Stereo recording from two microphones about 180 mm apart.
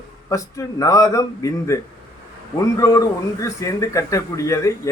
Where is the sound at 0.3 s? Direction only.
15° left (ahead or behind).